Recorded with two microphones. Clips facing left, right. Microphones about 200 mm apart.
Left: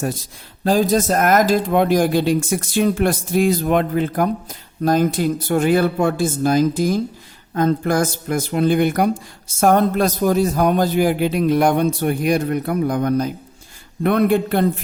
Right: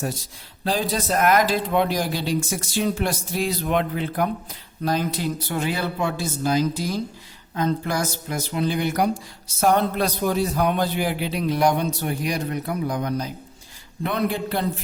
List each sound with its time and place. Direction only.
0.6 s a man's voice: 45° left (ahead or behind)